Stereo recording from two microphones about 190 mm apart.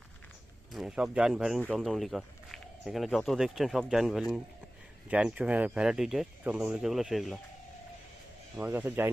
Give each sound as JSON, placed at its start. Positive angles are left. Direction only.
{"t": 0.7, "sound": "speech", "side_deg": -5}
{"t": 8.5, "sound": "a man's voice", "side_deg": -10}